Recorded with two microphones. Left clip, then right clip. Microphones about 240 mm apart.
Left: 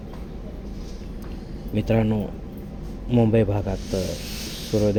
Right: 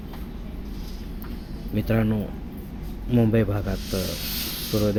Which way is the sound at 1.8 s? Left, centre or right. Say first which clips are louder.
Left 2 dB; centre.